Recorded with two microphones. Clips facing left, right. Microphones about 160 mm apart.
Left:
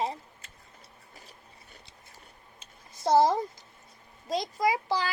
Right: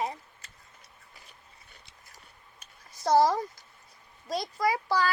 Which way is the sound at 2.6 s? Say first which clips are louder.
Left 2 dB; 20° left (ahead or behind).